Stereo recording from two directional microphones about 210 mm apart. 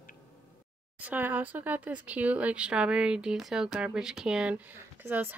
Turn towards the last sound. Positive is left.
turn(degrees=-10)  # may be behind; listen again after turning